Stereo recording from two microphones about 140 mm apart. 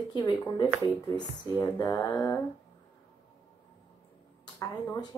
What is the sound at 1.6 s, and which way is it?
Speech, 20° left (ahead or behind).